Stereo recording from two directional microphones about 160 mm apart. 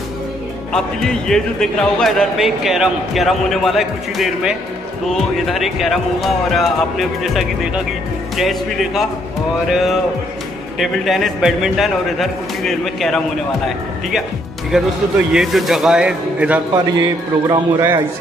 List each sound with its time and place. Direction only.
0.7 s a man's voice: 5° left (ahead or behind)
14.7 s a man's voice: centre (ahead or behind)
16.7 s a man's voice: 25° right (ahead or behind)